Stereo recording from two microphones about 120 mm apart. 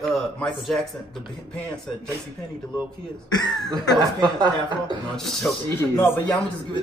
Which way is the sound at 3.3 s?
35° left (ahead or behind).